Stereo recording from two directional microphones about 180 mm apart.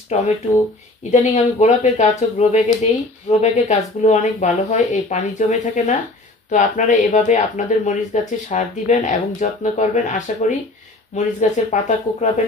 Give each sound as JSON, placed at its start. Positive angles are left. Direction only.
{"t": 1.1, "sound": "speech", "side_deg": 40}